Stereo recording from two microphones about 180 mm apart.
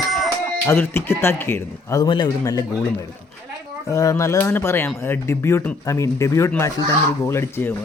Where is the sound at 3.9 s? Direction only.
15° left (ahead or behind).